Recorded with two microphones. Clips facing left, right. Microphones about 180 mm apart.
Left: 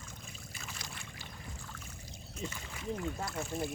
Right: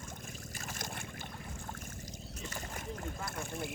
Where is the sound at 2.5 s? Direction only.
45° right (ahead or behind).